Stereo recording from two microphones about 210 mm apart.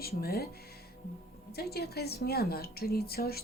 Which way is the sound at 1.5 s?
50° left (ahead or behind).